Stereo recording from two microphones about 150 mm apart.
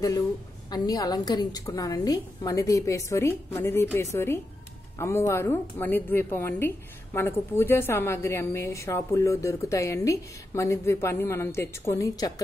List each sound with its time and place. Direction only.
0.7 s a woman's voice: 25° left (ahead or behind)